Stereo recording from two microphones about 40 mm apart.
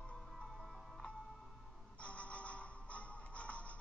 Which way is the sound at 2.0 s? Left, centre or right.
Left.